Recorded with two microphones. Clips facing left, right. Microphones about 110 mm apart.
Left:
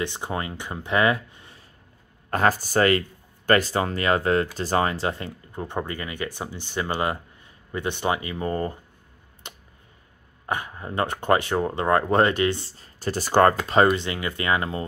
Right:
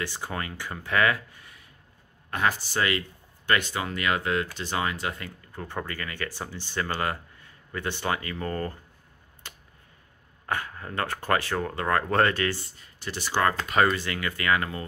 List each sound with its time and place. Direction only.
0.0 s speech: 20° left (ahead or behind)
2.3 s speech: 40° left (ahead or behind); by 8.7 s 20° left (ahead or behind)
9.5 s tick-tock: 20° left (ahead or behind)
10.4 s speech: 20° left (ahead or behind); by 13.6 s 45° left (ahead or behind)
13.8 s speech: 20° left (ahead or behind)